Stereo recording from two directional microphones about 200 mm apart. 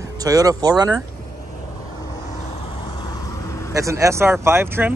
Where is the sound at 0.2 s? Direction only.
20° right (ahead or behind).